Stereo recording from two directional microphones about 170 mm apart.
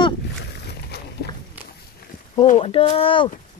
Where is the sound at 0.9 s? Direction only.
75° left (ahead or behind).